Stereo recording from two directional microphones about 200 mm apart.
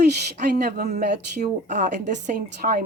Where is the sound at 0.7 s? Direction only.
50° right (ahead or behind).